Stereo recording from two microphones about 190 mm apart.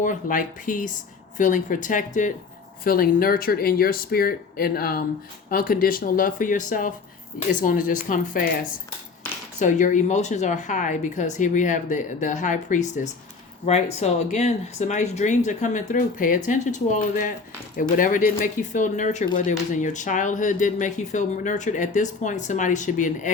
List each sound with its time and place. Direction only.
0.0 s speech: 45° left (ahead or behind)
9.6 s speech: 40° left (ahead or behind)